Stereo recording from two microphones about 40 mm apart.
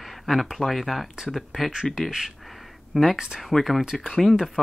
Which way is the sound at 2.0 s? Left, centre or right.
Centre.